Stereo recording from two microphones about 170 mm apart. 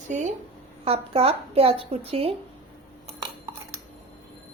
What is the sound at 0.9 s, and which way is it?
A woman's voice, 35° right (ahead or behind).